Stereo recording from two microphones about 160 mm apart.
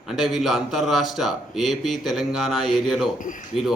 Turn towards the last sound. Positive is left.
turn(degrees=55)  # may be behind; listen again after turning